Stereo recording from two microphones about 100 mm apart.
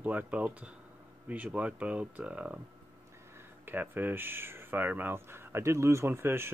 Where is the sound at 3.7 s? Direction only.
20° right (ahead or behind).